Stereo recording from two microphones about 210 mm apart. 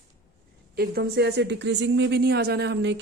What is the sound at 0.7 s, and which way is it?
Speech, 50° right (ahead or behind).